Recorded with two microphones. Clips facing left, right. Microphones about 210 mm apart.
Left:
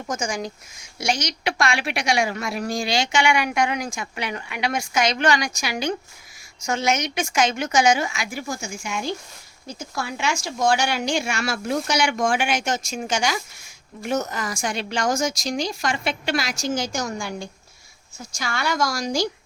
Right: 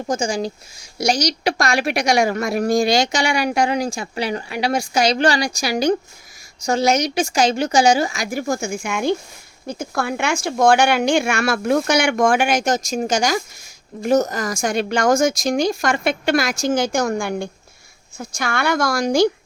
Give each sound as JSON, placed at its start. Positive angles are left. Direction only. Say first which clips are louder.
{"t": 0.1, "sound": "a woman's voice", "louder": "right 6 dB", "side_deg": -30}